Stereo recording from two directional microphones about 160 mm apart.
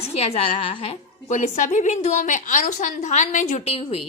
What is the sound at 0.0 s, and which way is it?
A woman's voice, 40° left (ahead or behind).